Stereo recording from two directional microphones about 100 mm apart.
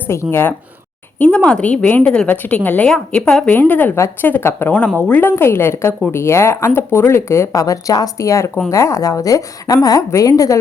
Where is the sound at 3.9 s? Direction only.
30° left (ahead or behind).